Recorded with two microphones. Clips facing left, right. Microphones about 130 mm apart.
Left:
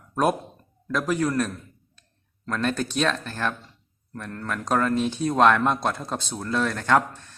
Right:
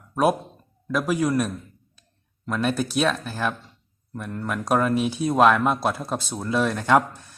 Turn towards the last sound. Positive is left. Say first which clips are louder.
# right 2 dB
turn(degrees=-10)  # may be behind; listen again after turning